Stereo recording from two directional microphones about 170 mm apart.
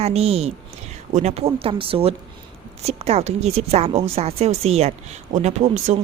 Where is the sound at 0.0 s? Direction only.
35° right (ahead or behind).